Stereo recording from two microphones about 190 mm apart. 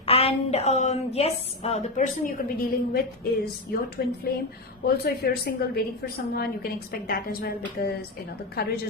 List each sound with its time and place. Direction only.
0.0 s a woman's voice: 30° left (ahead or behind); by 8.7 s 55° left (ahead or behind)